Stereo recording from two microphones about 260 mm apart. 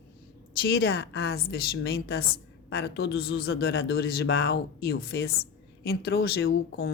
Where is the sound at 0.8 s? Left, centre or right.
Left.